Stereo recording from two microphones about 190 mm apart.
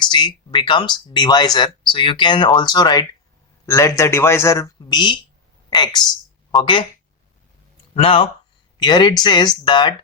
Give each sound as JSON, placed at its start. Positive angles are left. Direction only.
{"t": 0.0, "sound": "speech", "side_deg": 25}
{"t": 7.9, "sound": "speech", "side_deg": 30}